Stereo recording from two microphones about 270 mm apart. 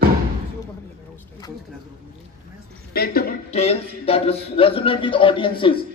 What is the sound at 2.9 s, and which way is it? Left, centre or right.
A man's voice, left.